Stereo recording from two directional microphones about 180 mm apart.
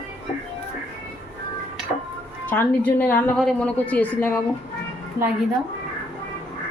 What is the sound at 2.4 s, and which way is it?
A woman's voice, 10° left (ahead or behind).